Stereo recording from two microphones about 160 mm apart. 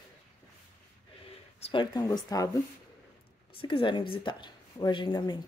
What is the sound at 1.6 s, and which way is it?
Speech, 30° left (ahead or behind).